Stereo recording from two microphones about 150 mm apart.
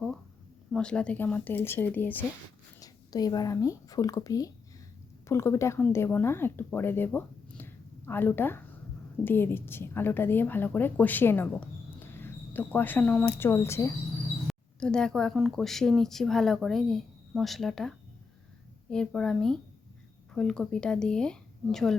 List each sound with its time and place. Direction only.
0.7 s a woman's voice: 5° left (ahead or behind)
2.8 s a woman's voice: 25° left (ahead or behind)
14.4 s speech: 5° left (ahead or behind)